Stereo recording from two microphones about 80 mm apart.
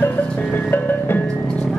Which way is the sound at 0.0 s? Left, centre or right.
Left.